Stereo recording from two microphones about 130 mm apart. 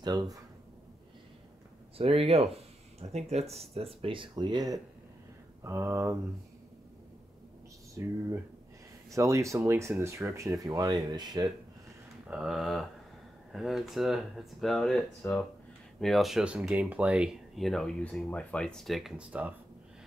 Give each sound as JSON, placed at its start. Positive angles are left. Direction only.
{"t": 0.0, "sound": "speech", "side_deg": -30}
{"t": 2.0, "sound": "speech", "side_deg": -45}
{"t": 5.6, "sound": "speech", "side_deg": -20}
{"t": 8.0, "sound": "speech", "side_deg": -25}
{"t": 12.3, "sound": "speech", "side_deg": -5}